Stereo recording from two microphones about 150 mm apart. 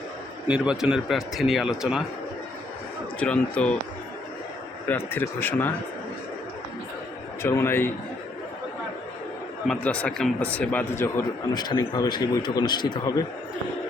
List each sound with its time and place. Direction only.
0.4 s a man's voice: 5° right (ahead or behind)
3.2 s speech: 10° left (ahead or behind)
4.9 s speech: 15° left (ahead or behind)
7.4 s speech: 15° left (ahead or behind)
9.6 s a man's voice: 10° left (ahead or behind); by 13.1 s 30° left (ahead or behind)